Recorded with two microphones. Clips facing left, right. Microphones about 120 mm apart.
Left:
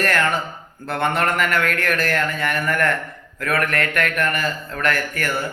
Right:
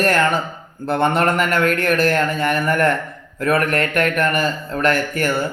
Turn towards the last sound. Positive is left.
turn(degrees=-25)  # may be behind; listen again after turning